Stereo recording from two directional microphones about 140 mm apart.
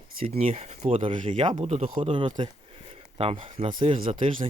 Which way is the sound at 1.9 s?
40° right (ahead or behind).